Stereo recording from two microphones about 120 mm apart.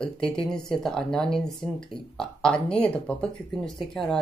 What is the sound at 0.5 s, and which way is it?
Speech, 5° left (ahead or behind).